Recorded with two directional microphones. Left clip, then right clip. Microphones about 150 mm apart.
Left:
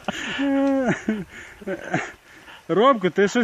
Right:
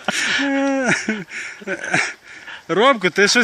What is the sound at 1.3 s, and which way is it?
Speech, 25° left (ahead or behind).